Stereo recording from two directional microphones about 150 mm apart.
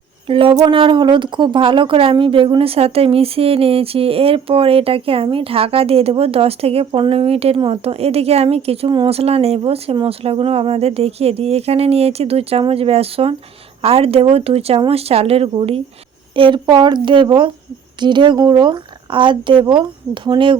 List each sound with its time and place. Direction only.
0.3 s a woman's voice: 35° right (ahead or behind)